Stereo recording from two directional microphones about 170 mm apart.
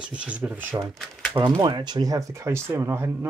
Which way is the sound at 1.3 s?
25° right (ahead or behind).